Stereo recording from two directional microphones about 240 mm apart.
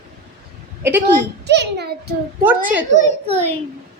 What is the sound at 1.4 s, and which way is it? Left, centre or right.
Speech, right.